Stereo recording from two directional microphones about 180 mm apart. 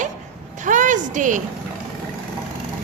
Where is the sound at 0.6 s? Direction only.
45° right (ahead or behind).